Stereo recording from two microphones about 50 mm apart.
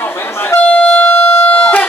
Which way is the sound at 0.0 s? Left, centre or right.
Left.